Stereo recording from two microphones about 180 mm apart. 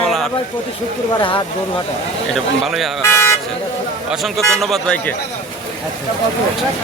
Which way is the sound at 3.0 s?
15° left (ahead or behind).